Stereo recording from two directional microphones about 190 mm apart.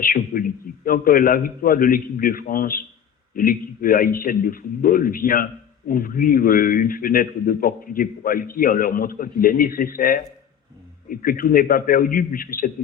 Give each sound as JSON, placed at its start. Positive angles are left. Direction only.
{"t": 0.0, "sound": "a man's voice", "side_deg": 50}